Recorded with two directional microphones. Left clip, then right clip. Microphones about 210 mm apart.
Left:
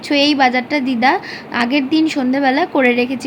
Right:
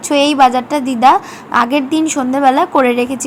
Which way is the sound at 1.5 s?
15° right (ahead or behind).